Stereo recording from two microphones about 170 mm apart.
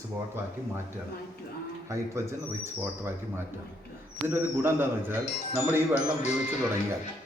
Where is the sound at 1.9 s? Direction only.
15° right (ahead or behind).